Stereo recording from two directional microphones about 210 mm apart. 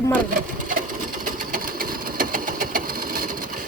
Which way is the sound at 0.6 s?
40° right (ahead or behind).